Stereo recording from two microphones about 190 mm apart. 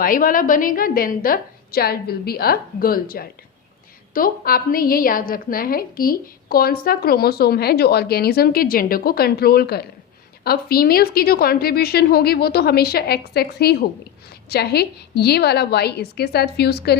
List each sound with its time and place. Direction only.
0.0 s a woman's voice: 45° left (ahead or behind)